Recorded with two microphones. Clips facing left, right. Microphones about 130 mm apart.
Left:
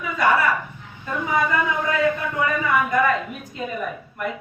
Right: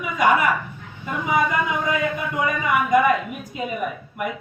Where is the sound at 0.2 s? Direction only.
15° right (ahead or behind).